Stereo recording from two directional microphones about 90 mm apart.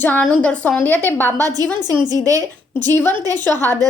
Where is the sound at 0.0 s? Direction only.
15° left (ahead or behind).